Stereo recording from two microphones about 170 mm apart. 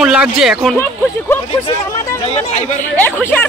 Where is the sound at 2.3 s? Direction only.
45° left (ahead or behind).